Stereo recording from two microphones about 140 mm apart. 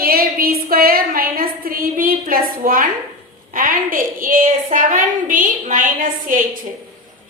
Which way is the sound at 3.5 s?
75° right (ahead or behind).